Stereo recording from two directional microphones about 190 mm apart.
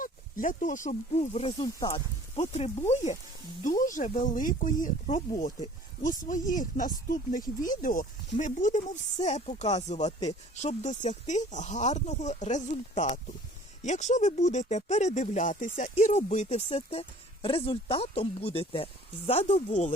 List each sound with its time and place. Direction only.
0.0 s speech: 45° left (ahead or behind)